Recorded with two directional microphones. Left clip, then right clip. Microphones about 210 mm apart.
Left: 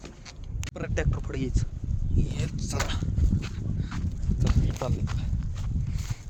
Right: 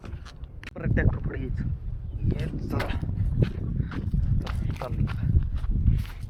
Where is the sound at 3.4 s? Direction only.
10° left (ahead or behind).